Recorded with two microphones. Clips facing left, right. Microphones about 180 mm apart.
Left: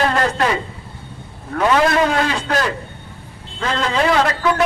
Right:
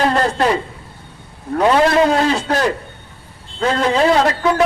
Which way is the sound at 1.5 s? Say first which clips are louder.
Right 3 dB; 30° right (ahead or behind).